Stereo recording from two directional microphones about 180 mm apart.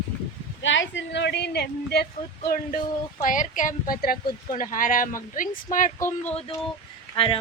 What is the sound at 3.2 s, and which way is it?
Speech, 45° left (ahead or behind).